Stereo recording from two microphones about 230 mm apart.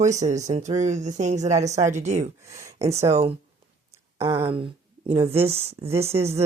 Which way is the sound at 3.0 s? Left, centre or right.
Right.